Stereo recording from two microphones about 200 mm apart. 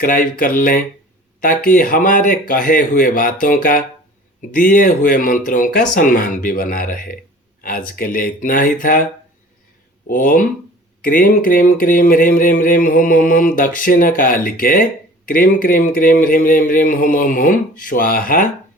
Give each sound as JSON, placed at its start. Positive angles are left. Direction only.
{"t": 0.0, "sound": "speech", "side_deg": 45}
{"t": 10.1, "sound": "speech", "side_deg": 45}